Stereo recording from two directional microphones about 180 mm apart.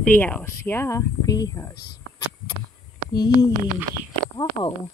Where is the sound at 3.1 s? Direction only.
20° left (ahead or behind).